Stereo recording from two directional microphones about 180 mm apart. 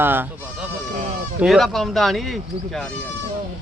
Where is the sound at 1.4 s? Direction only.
Centre (ahead or behind).